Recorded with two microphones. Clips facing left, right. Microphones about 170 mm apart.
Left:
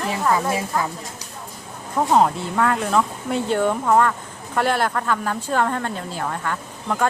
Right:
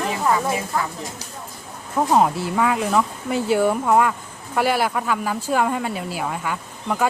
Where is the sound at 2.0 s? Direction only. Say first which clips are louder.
Even; centre (ahead or behind).